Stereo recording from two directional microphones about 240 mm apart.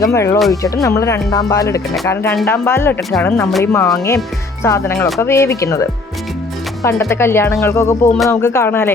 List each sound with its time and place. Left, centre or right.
0.0 s speech: centre
5.0 s speech: centre
5.3 s speech: centre
7.0 s speech: centre